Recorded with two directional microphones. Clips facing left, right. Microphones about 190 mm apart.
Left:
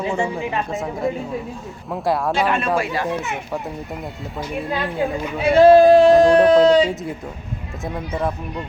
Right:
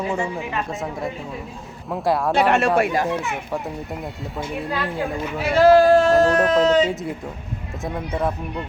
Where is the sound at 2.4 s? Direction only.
75° right (ahead or behind).